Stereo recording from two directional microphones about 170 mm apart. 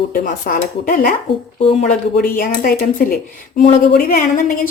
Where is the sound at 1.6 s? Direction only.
40° left (ahead or behind).